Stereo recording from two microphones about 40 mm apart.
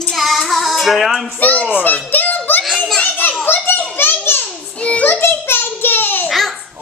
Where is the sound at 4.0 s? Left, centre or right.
Left.